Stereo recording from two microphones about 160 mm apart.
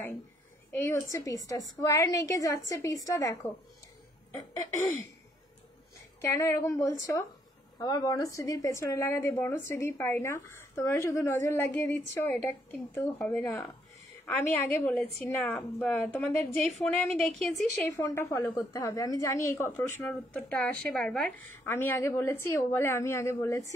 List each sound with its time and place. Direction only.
0.7 s a woman's voice: 15° left (ahead or behind)
6.2 s a woman's voice: 15° left (ahead or behind); by 17.6 s centre (ahead or behind)
17.9 s a woman's voice: 15° left (ahead or behind)